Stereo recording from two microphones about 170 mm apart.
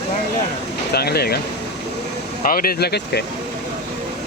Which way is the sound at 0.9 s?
70° left (ahead or behind).